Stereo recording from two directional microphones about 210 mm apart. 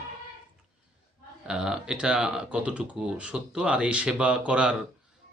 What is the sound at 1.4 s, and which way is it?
Speech, 5° right (ahead or behind).